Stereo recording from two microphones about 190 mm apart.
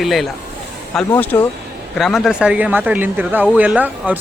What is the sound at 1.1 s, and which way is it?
Speech, 10° left (ahead or behind).